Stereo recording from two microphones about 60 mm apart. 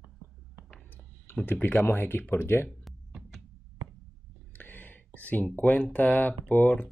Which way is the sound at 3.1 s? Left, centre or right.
Centre.